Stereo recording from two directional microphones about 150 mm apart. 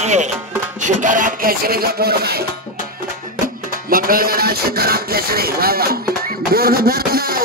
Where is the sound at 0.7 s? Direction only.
55° right (ahead or behind); by 2.4 s 90° right.